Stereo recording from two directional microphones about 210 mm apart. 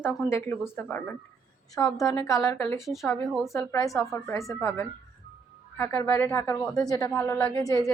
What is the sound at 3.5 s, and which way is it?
Speech, 15° left (ahead or behind).